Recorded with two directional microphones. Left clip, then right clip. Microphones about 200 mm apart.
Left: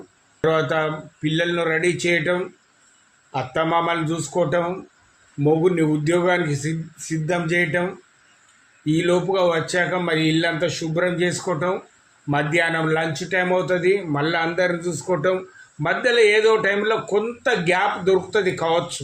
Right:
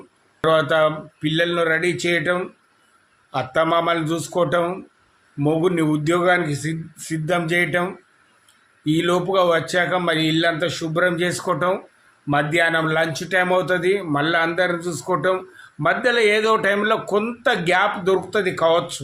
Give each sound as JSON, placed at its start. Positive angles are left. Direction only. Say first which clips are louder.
{"t": 0.4, "sound": "a man's voice", "louder": "right 3 dB", "side_deg": -20}